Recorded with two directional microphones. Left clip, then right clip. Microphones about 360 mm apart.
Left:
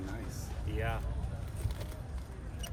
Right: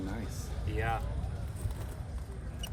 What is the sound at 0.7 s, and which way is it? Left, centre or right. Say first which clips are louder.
Speech: right 4 dB; right.